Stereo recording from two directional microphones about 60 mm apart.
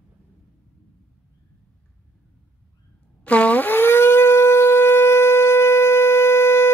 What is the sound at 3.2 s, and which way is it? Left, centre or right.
Shofar, left.